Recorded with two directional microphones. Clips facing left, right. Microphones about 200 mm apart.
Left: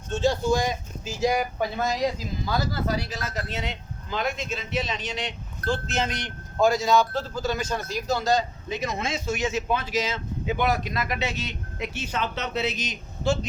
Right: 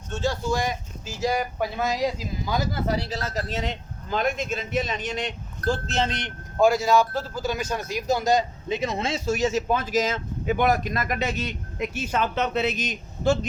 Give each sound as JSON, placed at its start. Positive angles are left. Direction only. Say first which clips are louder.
{"t": 0.2, "sound": "speech", "louder": "left 3 dB", "side_deg": 20}
{"t": 1.5, "sound": "speech", "louder": "even", "side_deg": -5}
{"t": 2.5, "sound": "a man's voice", "louder": "right 1 dB", "side_deg": -20}
{"t": 6.6, "sound": "a man's voice", "louder": "right 1 dB", "side_deg": -10}